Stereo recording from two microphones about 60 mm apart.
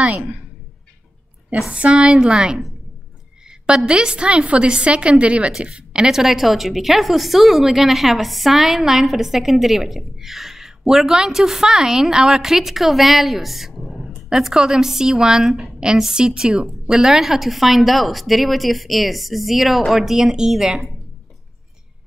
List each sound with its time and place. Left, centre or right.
0.0 s a woman's voice: right
1.7 s a woman's voice: centre